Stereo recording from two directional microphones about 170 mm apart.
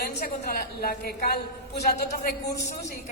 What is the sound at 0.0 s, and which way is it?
A woman's voice, 65° left (ahead or behind).